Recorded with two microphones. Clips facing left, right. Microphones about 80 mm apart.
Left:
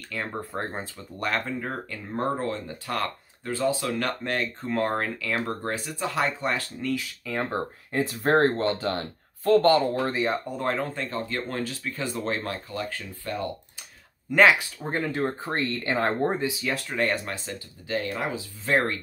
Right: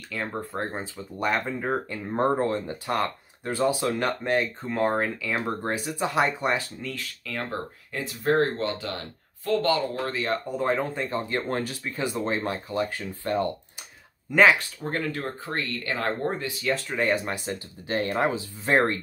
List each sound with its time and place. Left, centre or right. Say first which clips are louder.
0.1 s speech: right 1 dB; centre
1.6 s speech: right 5 dB; right
4.6 s speech: right 1 dB; centre
6.8 s speech: left 6 dB; centre
7.2 s speech: left 3 dB; left
10.0 s speech: left 2 dB; centre
10.6 s speech: right 3 dB; centre
11.0 s speech: right 2 dB; centre
14.5 s speech: even; centre
16.9 s speech: even; centre
17.5 s speech: right 2 dB; right